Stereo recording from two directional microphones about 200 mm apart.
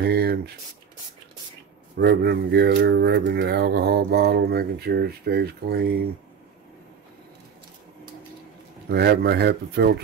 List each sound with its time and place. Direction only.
0.0 s a sound: 55° right (ahead or behind)
2.0 s speech: 55° right (ahead or behind)
8.8 s speech: 55° right (ahead or behind)